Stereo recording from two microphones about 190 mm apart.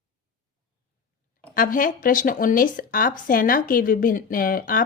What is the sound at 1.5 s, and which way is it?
Speech, 45° left (ahead or behind).